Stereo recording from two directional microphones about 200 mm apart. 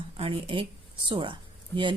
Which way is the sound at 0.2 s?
30° right (ahead or behind).